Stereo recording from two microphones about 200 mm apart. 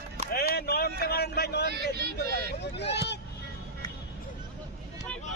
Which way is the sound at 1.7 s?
55° right (ahead or behind).